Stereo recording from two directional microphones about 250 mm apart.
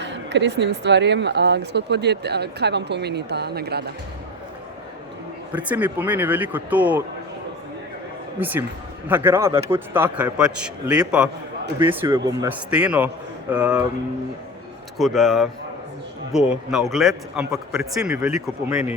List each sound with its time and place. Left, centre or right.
0.0 s speech: right
5.5 s a man's voice: centre
8.4 s a man's voice: centre
14.9 s speech: centre